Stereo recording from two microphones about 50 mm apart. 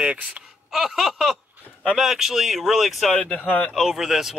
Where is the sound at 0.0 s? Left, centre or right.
Right.